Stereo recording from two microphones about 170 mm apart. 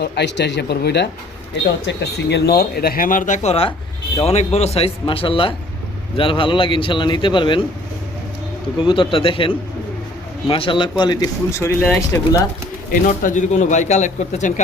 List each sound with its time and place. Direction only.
0.0 s speech: 85° left; by 7.6 s 30° left (ahead or behind)
8.8 s speech: 30° left (ahead or behind)
12.9 s speech: 50° left (ahead or behind)